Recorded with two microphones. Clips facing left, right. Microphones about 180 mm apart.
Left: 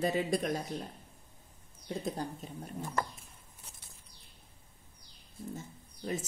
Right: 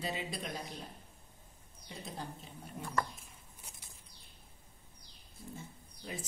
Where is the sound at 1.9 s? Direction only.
45° left (ahead or behind).